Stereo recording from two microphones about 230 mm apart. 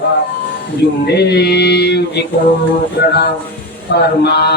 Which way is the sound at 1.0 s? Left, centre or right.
Left.